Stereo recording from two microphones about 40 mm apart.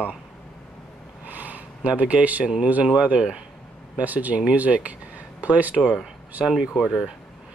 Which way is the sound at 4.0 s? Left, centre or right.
Right.